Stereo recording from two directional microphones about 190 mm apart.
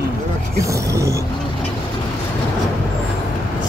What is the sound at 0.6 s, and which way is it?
Speech, 15° right (ahead or behind).